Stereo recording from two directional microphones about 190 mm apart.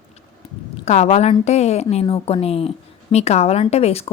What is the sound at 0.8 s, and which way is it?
A woman's voice, 35° left (ahead or behind).